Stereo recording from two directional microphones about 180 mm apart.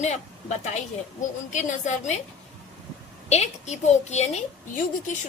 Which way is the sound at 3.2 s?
40° left (ahead or behind).